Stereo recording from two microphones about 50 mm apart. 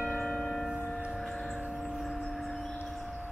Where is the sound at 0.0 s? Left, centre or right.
Centre.